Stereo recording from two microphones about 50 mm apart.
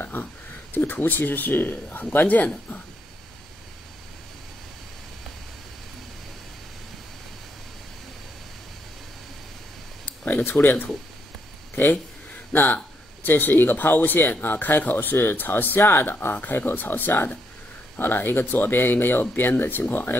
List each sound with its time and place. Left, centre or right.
0.0 s a sound: left
0.7 s a man's voice: left
10.2 s a man's voice: left
15.8 s speech: left